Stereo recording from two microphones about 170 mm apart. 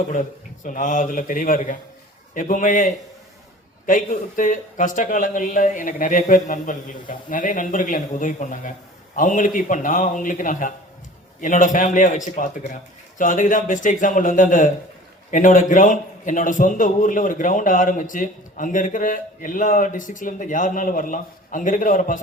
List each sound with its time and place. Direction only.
0.1 s a man's voice: 50° left (ahead or behind)